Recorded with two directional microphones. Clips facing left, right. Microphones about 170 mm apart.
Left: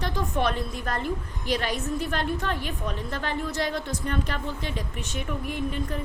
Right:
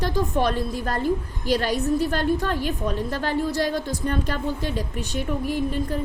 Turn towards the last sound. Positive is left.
turn(degrees=-35)  # may be behind; listen again after turning